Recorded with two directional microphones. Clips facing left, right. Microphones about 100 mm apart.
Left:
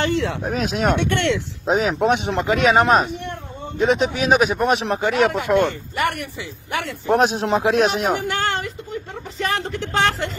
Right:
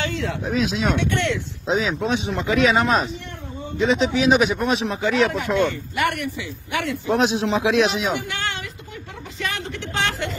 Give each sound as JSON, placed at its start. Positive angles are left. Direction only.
{"t": 0.0, "sound": "a sound", "side_deg": 65}
{"t": 0.4, "sound": "speech", "side_deg": 55}
{"t": 1.7, "sound": "speech", "side_deg": 50}
{"t": 2.4, "sound": "speech", "side_deg": 40}
{"t": 2.8, "sound": "speech", "side_deg": 50}
{"t": 6.9, "sound": "speech", "side_deg": 50}
{"t": 9.4, "sound": "a sound", "side_deg": 40}